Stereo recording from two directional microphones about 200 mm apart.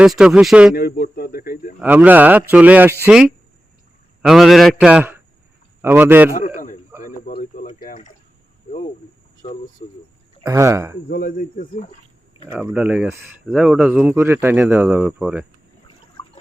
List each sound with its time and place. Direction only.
0.0 s a man's voice: 5° right (ahead or behind)
0.8 s speech: 50° left (ahead or behind)
1.8 s a man's voice: 10° right (ahead or behind)
7.0 s a sound: 40° left (ahead or behind)
9.4 s speech: 30° left (ahead or behind)
10.4 s speech: 15° right (ahead or behind)
11.1 s speech: 45° left (ahead or behind)
12.7 s speech: 5° right (ahead or behind)